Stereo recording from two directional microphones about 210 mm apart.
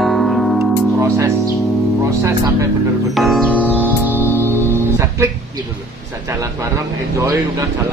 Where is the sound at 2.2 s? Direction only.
15° right (ahead or behind).